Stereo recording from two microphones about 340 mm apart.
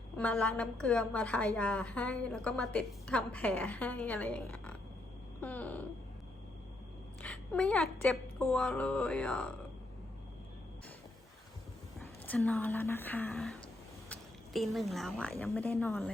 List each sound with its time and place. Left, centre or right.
0.2 s a woman's voice: centre
7.2 s a woman's voice: centre
11.9 s a woman's voice: centre